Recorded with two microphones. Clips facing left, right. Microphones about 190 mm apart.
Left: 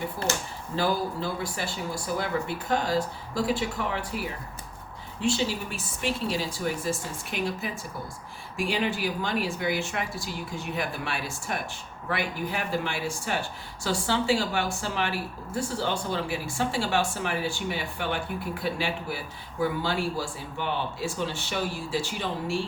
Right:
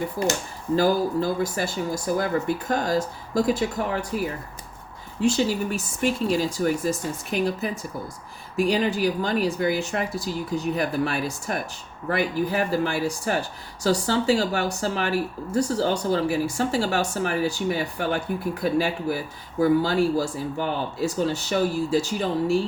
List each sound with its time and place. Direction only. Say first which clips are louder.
0.8 s speech: right 5 dB; 40° right (ahead or behind)